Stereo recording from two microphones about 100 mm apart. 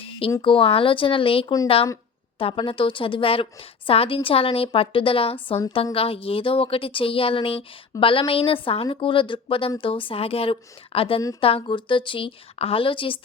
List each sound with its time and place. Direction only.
0.4 s a woman's voice: 65° left (ahead or behind)